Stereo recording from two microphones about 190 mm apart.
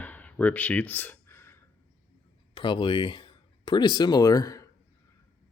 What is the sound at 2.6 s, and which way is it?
Speech, 25° left (ahead or behind).